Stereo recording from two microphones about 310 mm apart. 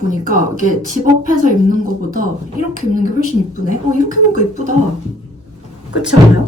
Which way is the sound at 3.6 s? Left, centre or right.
Right.